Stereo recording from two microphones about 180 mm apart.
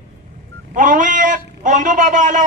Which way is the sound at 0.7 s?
45° right (ahead or behind).